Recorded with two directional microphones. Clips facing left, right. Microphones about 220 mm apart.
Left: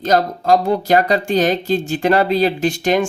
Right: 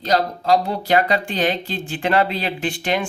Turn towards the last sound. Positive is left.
turn(degrees=40)  # may be behind; listen again after turning